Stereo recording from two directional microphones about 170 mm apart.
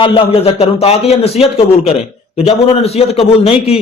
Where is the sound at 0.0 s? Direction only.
35° left (ahead or behind).